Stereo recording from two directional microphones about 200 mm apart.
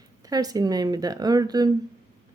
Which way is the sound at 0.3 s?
20° right (ahead or behind).